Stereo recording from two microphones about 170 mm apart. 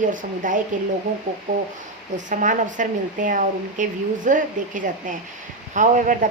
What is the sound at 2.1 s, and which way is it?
Speech, 50° right (ahead or behind).